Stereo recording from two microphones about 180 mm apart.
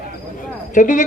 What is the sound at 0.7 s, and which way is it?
Speech, 45° left (ahead or behind).